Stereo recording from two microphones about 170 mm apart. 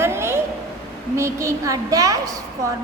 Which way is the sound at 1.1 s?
15° right (ahead or behind).